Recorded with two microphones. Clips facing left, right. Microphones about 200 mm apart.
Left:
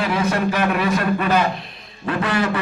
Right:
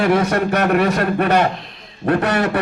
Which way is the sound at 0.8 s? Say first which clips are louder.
Right 3 dB; 65° right (ahead or behind).